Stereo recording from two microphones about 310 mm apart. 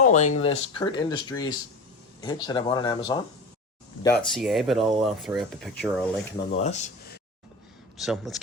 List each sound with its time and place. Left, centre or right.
0.0 s speech: left; by 6.2 s centre
6.5 s speech: left
7.9 s speech: centre